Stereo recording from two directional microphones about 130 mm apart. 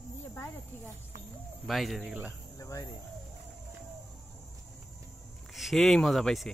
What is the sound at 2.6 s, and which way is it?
Speech, 25° left (ahead or behind).